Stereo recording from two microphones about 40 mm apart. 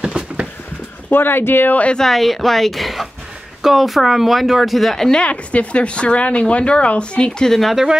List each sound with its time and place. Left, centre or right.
0.0 s a sound: right
1.1 s speech: left
2.0 s speech: centre
5.1 s speech: left
7.4 s speech: centre
7.7 s speech: centre